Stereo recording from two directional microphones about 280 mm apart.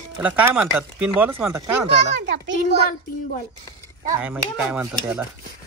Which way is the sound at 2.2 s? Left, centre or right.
Right.